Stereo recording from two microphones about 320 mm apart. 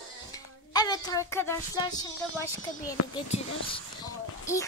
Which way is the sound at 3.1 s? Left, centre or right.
Centre.